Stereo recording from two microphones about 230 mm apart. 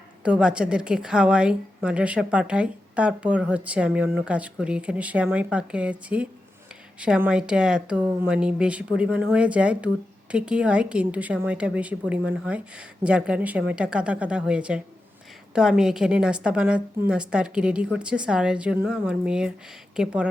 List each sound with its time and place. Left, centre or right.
0.2 s a woman's voice: centre